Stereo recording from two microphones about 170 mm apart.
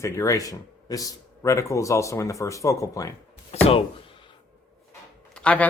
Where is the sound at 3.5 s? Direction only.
35° left (ahead or behind).